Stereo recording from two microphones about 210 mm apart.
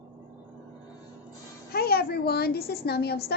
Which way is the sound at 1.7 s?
45° left (ahead or behind).